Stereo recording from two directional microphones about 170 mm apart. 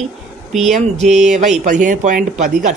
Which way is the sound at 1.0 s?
40° right (ahead or behind).